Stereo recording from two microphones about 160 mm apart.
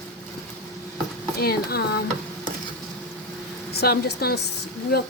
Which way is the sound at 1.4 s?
70° left (ahead or behind).